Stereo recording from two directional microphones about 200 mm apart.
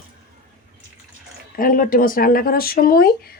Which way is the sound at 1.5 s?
45° left (ahead or behind).